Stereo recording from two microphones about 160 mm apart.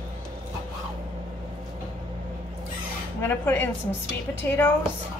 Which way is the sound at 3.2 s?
15° left (ahead or behind).